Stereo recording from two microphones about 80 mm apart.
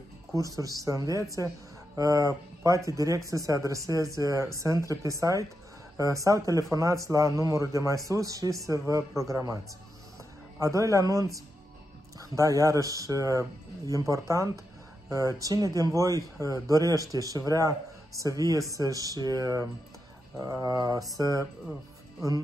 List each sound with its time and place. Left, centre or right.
0.6 s a man's voice: right
10.6 s a man's voice: right